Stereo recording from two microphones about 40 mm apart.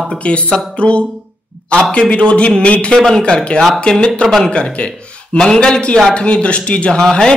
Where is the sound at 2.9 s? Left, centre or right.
Centre.